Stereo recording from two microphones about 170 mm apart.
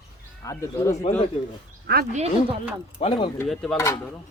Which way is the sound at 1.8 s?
65° right (ahead or behind).